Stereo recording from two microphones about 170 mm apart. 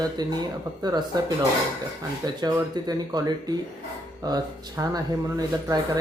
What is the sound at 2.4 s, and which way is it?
Speech, 25° right (ahead or behind).